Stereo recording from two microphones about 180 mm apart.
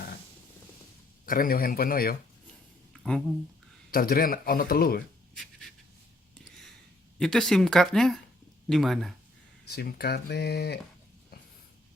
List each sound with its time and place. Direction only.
1.2 s speech: 50° left (ahead or behind)
2.9 s a sound: 5° left (ahead or behind)
3.9 s speech: 55° left (ahead or behind)
7.2 s speech: centre (ahead or behind)
9.6 s speech: 65° left (ahead or behind)